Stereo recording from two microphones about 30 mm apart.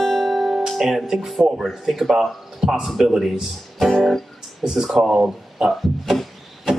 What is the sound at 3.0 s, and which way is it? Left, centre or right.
A man's voice, centre.